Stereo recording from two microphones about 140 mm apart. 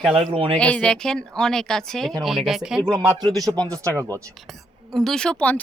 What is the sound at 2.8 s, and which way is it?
A man's voice, 30° right (ahead or behind).